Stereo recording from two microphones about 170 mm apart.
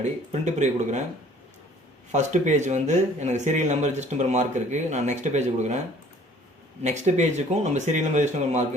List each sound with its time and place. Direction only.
0.0 s speech: 45° right (ahead or behind)
2.1 s speech: 45° right (ahead or behind)
6.8 s speech: 45° right (ahead or behind)